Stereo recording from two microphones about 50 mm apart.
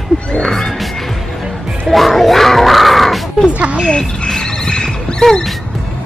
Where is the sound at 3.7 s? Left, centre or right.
Centre.